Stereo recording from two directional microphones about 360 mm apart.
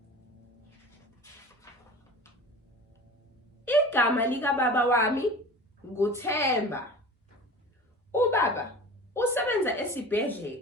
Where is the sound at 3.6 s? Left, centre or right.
Centre.